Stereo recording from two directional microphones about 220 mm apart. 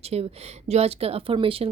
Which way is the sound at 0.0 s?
30° right (ahead or behind).